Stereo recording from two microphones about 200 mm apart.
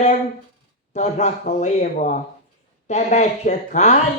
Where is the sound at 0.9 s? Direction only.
35° left (ahead or behind).